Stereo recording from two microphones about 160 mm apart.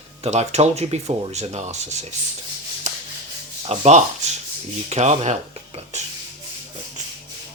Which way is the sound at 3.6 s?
40° right (ahead or behind).